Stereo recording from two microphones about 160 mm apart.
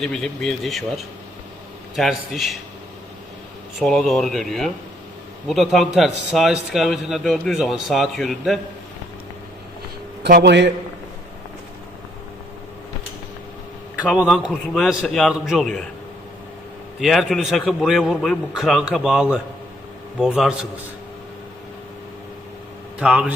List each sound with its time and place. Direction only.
0.0 s a man's voice: 5° left (ahead or behind)
2.0 s a man's voice: centre (ahead or behind)
3.8 s a man's voice: centre (ahead or behind)
10.2 s a man's voice: 80° right
14.0 s a man's voice: 5° right (ahead or behind)
17.0 s a man's voice: centre (ahead or behind)
23.0 s a man's voice: 5° right (ahead or behind)